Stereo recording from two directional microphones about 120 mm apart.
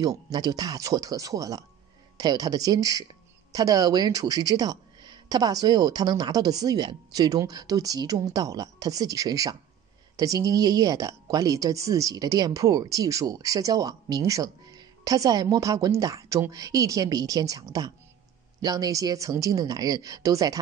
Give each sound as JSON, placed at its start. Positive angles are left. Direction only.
{"t": 0.0, "sound": "speech", "side_deg": -35}